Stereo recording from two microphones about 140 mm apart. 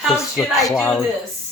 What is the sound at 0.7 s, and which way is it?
Speech, 15° left (ahead or behind).